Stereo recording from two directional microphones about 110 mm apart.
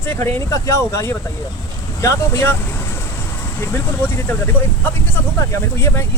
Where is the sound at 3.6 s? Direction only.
25° left (ahead or behind).